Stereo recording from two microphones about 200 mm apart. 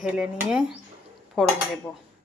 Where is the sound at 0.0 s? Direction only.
5° right (ahead or behind).